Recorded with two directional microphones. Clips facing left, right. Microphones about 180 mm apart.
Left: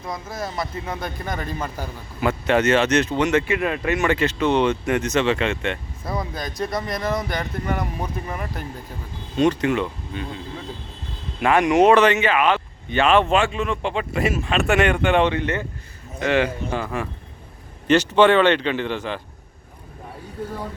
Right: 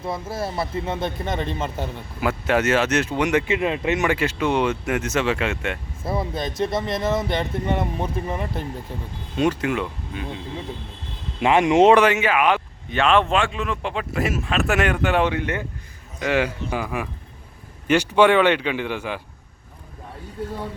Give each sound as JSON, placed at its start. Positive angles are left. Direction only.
{"t": 0.0, "sound": "speech", "side_deg": -30}
{"t": 2.2, "sound": "speech", "side_deg": -5}
{"t": 6.1, "sound": "speech", "side_deg": -25}
{"t": 9.4, "sound": "speech", "side_deg": -5}
{"t": 11.3, "sound": "speech", "side_deg": -20}
{"t": 11.9, "sound": "speech", "side_deg": -10}
{"t": 12.9, "sound": "speech", "side_deg": 0}